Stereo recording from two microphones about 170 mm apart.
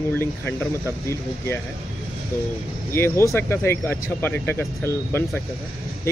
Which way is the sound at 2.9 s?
15° left (ahead or behind).